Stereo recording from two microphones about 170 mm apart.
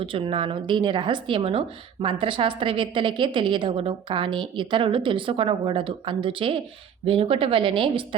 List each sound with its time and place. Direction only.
0.0 s a woman's voice: 30° right (ahead or behind)